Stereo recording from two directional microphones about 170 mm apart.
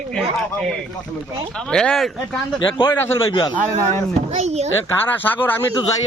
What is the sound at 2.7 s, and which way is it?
Speech, 25° left (ahead or behind).